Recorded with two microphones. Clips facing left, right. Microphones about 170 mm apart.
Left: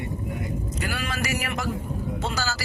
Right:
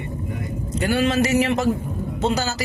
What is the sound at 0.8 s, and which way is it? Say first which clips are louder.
Speech: right 14 dB; 30° right (ahead or behind).